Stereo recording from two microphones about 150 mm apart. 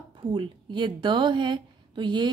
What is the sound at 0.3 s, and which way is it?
A woman's voice, 35° right (ahead or behind).